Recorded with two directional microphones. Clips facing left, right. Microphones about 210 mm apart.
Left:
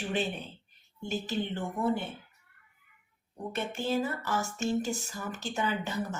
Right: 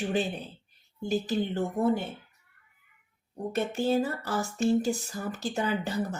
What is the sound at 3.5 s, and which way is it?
Speech, 40° right (ahead or behind).